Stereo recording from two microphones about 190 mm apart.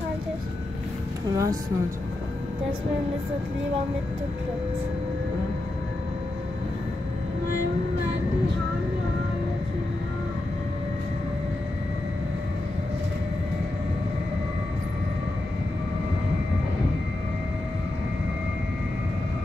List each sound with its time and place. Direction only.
1.3 s speech: 15° right (ahead or behind)